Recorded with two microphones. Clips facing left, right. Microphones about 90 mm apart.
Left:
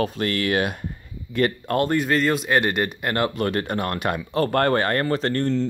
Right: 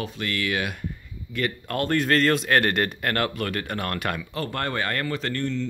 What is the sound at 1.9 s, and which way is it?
Speech, 10° left (ahead or behind).